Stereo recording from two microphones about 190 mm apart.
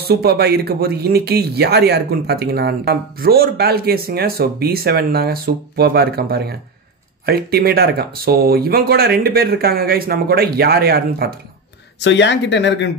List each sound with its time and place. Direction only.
0.1 s speech: 55° right (ahead or behind)
12.0 s speech: 70° left (ahead or behind)